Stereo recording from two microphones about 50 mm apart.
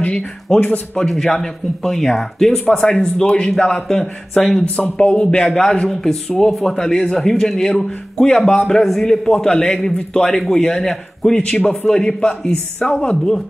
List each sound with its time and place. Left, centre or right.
0.5 s a man's voice: centre
3.9 s speech: centre
4.9 s a man's voice: left
5.5 s speech: centre
11.3 s a man's voice: left